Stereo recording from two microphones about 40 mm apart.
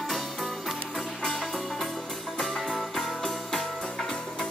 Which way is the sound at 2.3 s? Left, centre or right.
Centre.